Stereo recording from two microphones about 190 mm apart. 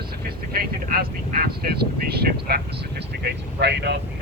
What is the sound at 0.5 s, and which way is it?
Speech, 55° right (ahead or behind).